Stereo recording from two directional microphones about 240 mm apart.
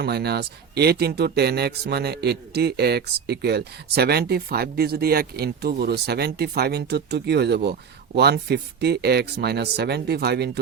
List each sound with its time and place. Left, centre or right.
0.0 s speech: right